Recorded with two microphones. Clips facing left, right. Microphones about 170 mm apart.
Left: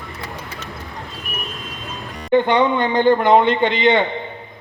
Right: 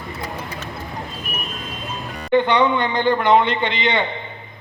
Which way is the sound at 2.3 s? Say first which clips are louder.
Left 1 dB; 45° left (ahead or behind).